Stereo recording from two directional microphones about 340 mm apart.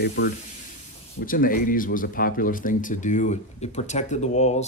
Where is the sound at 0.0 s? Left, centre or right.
Left.